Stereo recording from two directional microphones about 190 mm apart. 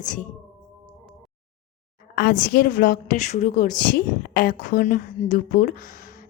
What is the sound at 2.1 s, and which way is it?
A woman's voice, 55° left (ahead or behind).